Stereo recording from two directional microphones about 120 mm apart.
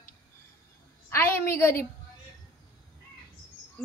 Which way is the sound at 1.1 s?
20° left (ahead or behind).